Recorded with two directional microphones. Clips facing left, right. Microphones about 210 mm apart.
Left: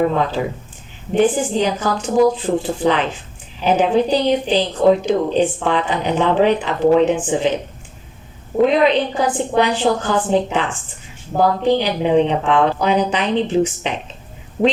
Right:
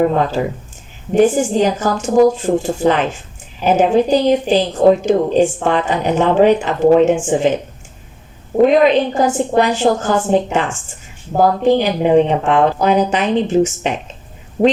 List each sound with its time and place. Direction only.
0.4 s a woman's voice: 50° right (ahead or behind)
8.6 s a woman's voice: 45° right (ahead or behind)